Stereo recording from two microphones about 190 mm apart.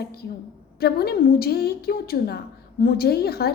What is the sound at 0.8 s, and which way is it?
A woman's voice, 55° left (ahead or behind).